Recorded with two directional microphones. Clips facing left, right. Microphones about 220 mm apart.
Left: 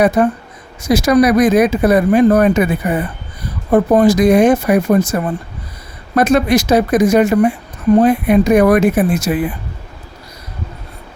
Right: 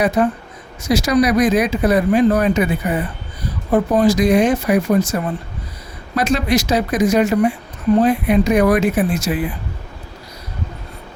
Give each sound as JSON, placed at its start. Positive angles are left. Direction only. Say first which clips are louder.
{"t": 0.2, "sound": "speech", "louder": "left 3 dB", "side_deg": 55}
{"t": 6.1, "sound": "speech", "louder": "left 5 dB", "side_deg": 55}